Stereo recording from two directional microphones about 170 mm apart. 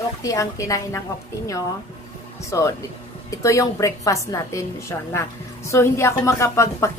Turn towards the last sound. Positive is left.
turn(degrees=15)  # may be behind; listen again after turning